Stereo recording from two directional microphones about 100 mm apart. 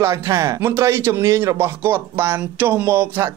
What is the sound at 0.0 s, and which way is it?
Speech, 30° right (ahead or behind).